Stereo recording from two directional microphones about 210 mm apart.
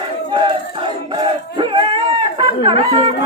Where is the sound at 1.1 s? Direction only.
25° right (ahead or behind).